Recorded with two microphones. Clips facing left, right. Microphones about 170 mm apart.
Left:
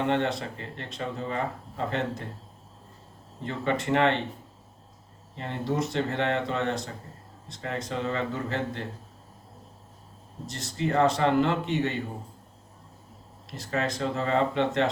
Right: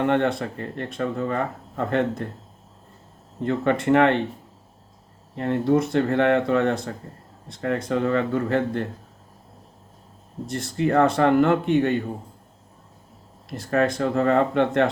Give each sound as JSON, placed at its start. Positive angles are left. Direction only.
{"t": 0.1, "sound": "speech", "side_deg": -55}
{"t": 3.4, "sound": "speech", "side_deg": -55}
{"t": 5.3, "sound": "speech", "side_deg": -55}
{"t": 10.4, "sound": "speech", "side_deg": -55}
{"t": 13.5, "sound": "speech", "side_deg": -55}